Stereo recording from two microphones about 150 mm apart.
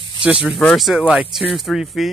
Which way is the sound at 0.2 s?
5° right (ahead or behind).